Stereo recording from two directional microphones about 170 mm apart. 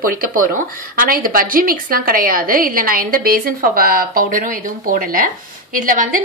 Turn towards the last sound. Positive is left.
turn(degrees=-55)  # may be behind; listen again after turning